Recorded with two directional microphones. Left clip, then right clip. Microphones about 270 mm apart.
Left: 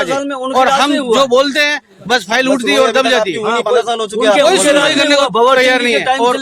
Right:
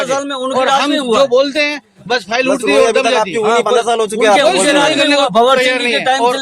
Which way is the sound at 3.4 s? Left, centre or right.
Centre.